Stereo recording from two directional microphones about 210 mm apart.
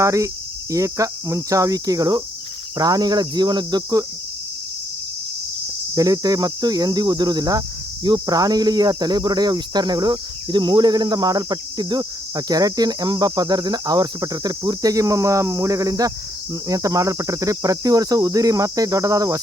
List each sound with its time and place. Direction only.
0.0 s cricket: 15° right (ahead or behind)
2.7 s speech: 20° right (ahead or behind)
5.9 s speech: 15° right (ahead or behind)
16.6 s cricket: 15° right (ahead or behind)